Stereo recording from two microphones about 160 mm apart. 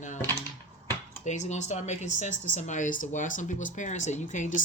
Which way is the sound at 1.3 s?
45° left (ahead or behind).